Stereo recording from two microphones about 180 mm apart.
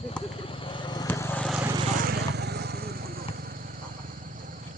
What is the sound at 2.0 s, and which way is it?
Vehicle, 60° right (ahead or behind).